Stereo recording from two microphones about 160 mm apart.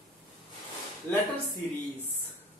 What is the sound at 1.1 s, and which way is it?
Speech, 15° left (ahead or behind).